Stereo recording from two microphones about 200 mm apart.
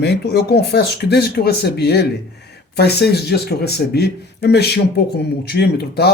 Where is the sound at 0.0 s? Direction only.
55° left (ahead or behind).